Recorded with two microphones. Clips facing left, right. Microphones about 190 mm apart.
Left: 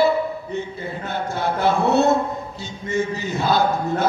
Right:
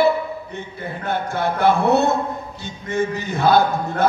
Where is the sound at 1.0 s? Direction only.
55° right (ahead or behind).